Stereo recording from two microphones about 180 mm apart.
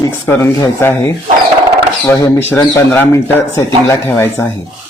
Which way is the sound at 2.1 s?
15° left (ahead or behind).